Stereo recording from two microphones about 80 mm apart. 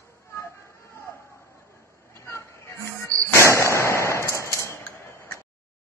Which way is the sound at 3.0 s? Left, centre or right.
Right.